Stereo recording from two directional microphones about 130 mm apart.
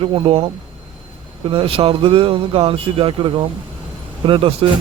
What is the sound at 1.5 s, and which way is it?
Speech, 45° right (ahead or behind).